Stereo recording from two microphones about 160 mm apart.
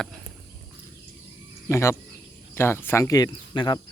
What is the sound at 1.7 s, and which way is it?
Speech, 15° left (ahead or behind).